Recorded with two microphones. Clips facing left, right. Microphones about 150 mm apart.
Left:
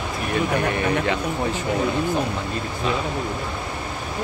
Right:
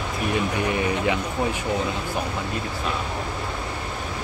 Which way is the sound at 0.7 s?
15° right (ahead or behind).